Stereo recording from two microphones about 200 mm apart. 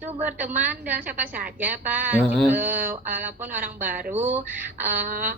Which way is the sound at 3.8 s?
45° right (ahead or behind).